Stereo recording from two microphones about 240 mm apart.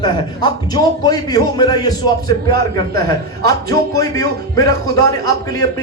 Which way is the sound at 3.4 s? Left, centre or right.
Centre.